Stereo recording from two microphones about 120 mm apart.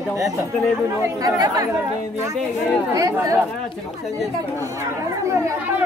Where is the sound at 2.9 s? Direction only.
30° right (ahead or behind).